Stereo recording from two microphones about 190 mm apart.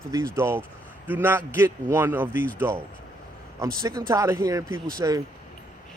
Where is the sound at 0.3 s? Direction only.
15° right (ahead or behind).